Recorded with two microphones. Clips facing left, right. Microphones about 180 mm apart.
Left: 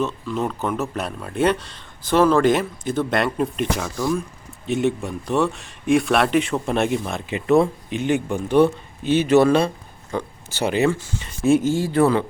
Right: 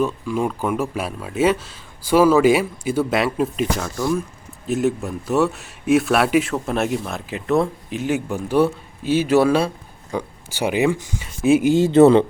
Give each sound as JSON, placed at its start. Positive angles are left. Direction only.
{"t": 0.0, "sound": "speech", "side_deg": -10}